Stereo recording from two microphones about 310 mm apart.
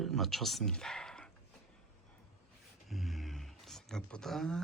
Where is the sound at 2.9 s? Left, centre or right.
Centre.